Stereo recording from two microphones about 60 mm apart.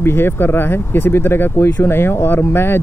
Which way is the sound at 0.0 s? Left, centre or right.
Left.